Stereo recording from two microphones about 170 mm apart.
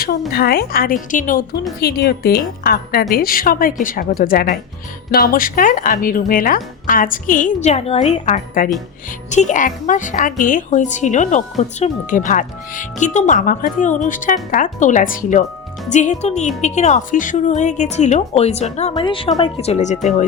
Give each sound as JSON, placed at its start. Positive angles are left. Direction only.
{"t": 0.3, "sound": "a woman's voice", "side_deg": 65}
{"t": 1.8, "sound": "a woman's voice", "side_deg": 70}